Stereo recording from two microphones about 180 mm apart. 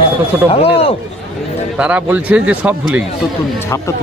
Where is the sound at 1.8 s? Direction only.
10° right (ahead or behind).